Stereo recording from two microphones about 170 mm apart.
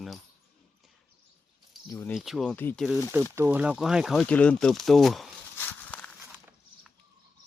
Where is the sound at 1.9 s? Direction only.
15° left (ahead or behind).